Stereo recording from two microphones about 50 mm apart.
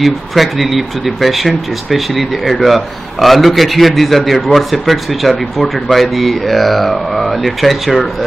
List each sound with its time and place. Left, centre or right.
0.0 s speech: centre